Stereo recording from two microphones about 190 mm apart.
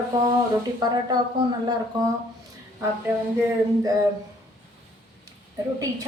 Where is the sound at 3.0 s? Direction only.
10° right (ahead or behind).